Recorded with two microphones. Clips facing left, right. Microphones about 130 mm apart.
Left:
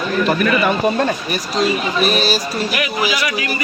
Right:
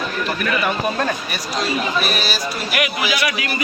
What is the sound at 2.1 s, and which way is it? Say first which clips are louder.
Speech: left 6 dB; 35° left (ahead or behind).